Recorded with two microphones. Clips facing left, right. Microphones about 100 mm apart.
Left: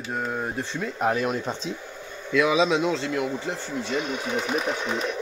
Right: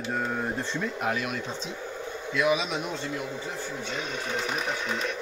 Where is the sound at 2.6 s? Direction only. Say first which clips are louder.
Left 8 dB; 90° left.